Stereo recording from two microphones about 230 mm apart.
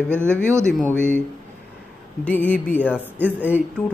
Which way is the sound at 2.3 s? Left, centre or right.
Centre.